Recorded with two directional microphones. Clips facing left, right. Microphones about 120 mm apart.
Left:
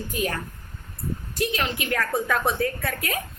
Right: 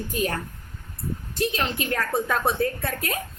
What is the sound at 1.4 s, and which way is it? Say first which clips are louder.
A woman's voice: right 1 dB; 30° right (ahead or behind).